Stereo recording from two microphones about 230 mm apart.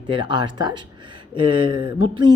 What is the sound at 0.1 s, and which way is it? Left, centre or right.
A woman's voice, right.